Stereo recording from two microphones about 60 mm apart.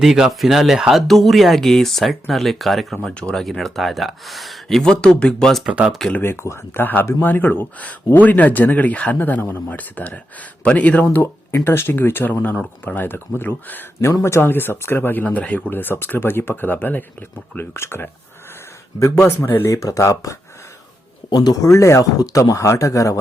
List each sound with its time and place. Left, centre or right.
0.0 s speech: centre
3.2 s speech: centre
3.4 s speech: centre
5.6 s speech: centre
6.2 s speech: left
7.3 s speech: left
11.5 s speech: left
18.9 s speech: left
19.5 s speech: left
19.7 s speech: left
21.4 s speech: left